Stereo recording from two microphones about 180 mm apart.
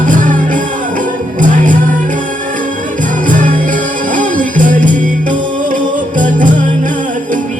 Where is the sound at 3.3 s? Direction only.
45° right (ahead or behind).